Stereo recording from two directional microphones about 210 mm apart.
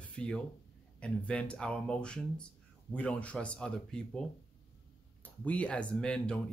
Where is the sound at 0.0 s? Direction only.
5° left (ahead or behind).